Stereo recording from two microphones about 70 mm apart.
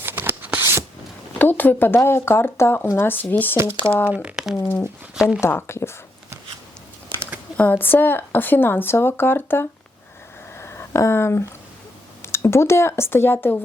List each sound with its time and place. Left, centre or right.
0.0 s shuffling cards: right
0.6 s a sound: right
1.4 s a woman's voice: left
3.6 s speech: right
4.1 s speech: centre
5.4 s speech: left
7.5 s a woman's voice: left
10.6 s a sound: left
12.2 s speech: left